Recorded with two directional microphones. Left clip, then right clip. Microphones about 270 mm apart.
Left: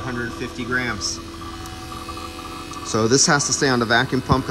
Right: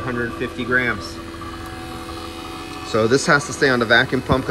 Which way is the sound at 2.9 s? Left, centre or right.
Centre.